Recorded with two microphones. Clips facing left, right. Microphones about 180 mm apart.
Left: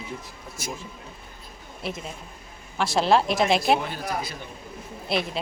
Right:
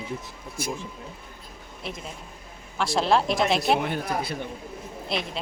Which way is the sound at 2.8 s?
Centre (ahead or behind).